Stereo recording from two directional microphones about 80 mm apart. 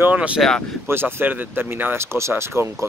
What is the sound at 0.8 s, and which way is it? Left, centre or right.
Speech, right.